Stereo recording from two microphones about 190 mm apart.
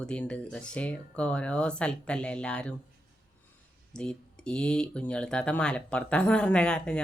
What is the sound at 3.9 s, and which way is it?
Speech, 5° left (ahead or behind).